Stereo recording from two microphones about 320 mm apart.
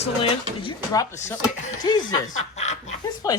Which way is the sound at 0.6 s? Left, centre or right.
Centre.